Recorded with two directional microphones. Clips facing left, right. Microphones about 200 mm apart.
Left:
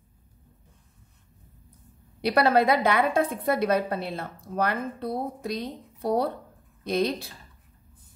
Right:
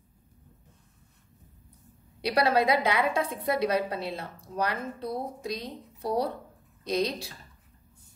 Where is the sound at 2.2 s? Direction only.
55° left (ahead or behind).